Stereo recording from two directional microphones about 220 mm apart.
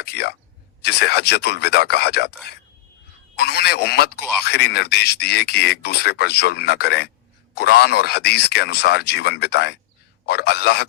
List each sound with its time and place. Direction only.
0.0 s speech: 50° left (ahead or behind)